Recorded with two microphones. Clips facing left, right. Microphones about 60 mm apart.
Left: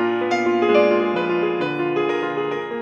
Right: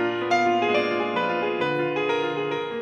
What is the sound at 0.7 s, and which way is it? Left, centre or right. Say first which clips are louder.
Music: left 8 dB; left.